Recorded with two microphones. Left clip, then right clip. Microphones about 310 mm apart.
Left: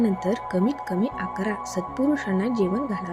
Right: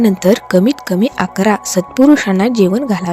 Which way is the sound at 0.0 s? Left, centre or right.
Right.